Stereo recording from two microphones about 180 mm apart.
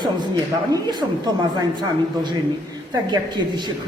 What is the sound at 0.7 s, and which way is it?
Speech, 20° right (ahead or behind).